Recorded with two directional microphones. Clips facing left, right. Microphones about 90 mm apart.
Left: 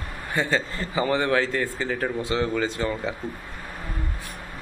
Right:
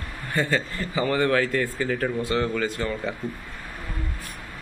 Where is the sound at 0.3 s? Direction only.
20° left (ahead or behind).